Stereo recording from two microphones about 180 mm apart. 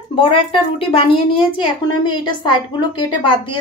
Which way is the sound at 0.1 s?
30° left (ahead or behind).